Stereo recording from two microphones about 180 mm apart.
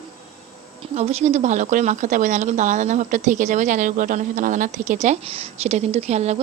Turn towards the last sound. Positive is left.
turn(degrees=-35)  # may be behind; listen again after turning